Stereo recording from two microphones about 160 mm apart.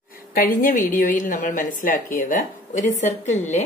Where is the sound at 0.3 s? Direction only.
60° left (ahead or behind).